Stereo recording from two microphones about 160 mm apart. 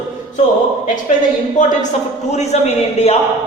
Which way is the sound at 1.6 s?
50° left (ahead or behind).